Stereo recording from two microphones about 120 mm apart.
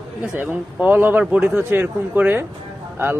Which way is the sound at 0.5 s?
15° right (ahead or behind).